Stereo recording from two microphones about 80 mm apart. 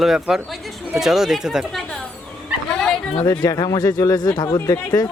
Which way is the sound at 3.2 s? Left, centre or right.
Left.